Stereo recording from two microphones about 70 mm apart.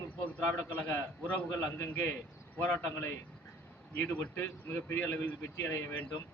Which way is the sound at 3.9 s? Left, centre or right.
Centre.